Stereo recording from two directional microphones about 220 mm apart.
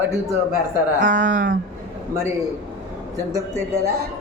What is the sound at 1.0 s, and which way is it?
Speech, 35° right (ahead or behind).